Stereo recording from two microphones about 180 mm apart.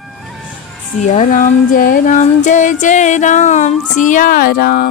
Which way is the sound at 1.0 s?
40° left (ahead or behind).